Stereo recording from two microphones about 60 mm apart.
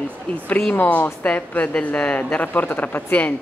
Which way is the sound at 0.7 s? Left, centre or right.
Left.